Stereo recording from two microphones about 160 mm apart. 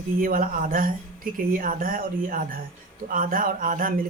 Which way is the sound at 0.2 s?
60° right (ahead or behind).